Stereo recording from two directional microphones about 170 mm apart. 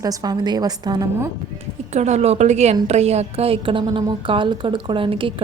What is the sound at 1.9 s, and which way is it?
A woman's voice, 40° right (ahead or behind).